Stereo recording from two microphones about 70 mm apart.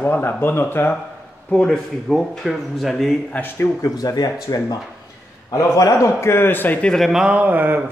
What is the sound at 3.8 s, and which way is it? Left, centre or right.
Speech, left.